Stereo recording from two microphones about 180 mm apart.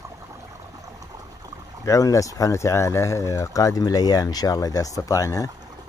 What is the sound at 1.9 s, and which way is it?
Speech, 20° left (ahead or behind).